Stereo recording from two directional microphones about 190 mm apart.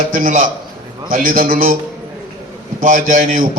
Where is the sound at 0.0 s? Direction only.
45° right (ahead or behind).